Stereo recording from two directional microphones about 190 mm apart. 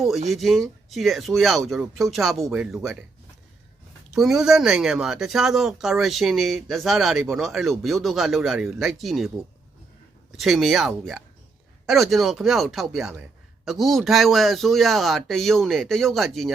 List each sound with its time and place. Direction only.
0.3 s speech: centre (ahead or behind)
4.1 s speech: centre (ahead or behind)
10.3 s speech: centre (ahead or behind)